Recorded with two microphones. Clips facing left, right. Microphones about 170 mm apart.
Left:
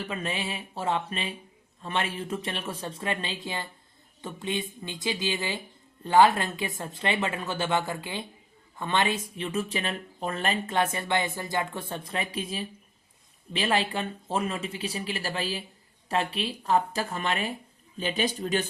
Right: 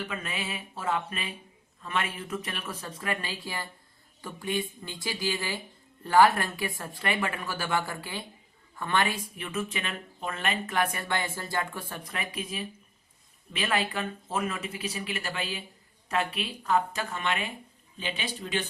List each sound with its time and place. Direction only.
0.1 s speech: 30° left (ahead or behind)